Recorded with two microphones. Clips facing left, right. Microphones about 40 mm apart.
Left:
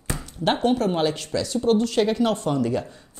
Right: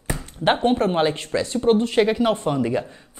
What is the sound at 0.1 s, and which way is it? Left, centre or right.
Speech, right.